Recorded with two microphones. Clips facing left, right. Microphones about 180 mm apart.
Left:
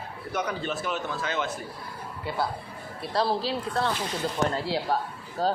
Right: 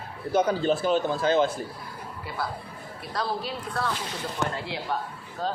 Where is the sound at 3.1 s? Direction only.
30° left (ahead or behind).